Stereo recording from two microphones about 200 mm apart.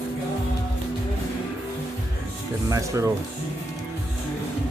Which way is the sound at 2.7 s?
15° right (ahead or behind).